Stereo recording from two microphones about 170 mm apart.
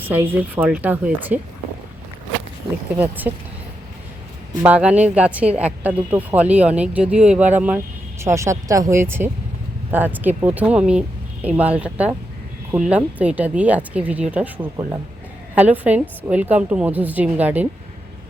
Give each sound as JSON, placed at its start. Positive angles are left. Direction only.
{"t": 0.1, "sound": "a woman's voice", "side_deg": -10}
{"t": 2.9, "sound": "a woman's voice", "side_deg": -10}
{"t": 4.6, "sound": "a woman's voice", "side_deg": -10}